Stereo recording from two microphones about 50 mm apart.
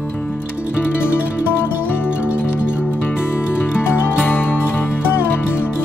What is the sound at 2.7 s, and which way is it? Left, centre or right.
Music, left.